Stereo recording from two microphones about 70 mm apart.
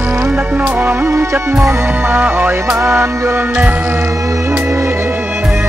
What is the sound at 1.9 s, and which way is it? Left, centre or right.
Music, right.